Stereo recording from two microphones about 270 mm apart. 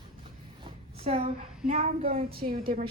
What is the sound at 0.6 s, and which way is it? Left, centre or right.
A woman's voice, right.